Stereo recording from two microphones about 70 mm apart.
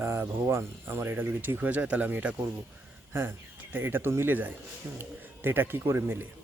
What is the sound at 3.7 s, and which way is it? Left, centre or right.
A man's voice, right.